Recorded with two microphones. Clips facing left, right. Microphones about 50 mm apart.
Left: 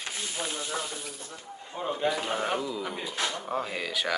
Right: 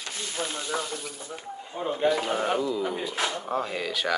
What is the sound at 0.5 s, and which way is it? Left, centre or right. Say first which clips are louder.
Speech: right 3 dB; centre.